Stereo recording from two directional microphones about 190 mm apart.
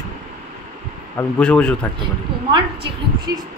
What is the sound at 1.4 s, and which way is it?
Speech, 5° left (ahead or behind).